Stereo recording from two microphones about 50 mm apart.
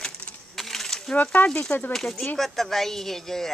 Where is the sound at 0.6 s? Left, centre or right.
Centre.